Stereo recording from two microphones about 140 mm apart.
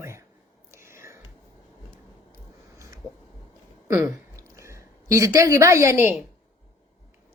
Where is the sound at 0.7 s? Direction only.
20° right (ahead or behind).